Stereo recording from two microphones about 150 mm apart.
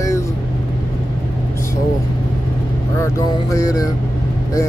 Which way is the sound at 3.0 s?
20° left (ahead or behind).